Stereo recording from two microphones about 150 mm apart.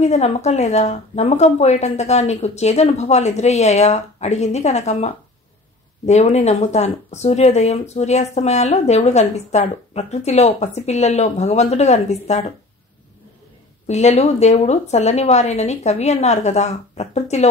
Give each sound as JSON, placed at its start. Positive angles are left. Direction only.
{"t": 0.0, "sound": "speech", "side_deg": 45}
{"t": 13.8, "sound": "speech", "side_deg": 45}